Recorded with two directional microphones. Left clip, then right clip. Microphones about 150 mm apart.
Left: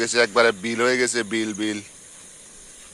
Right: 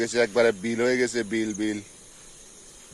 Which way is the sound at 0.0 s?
15° right (ahead or behind).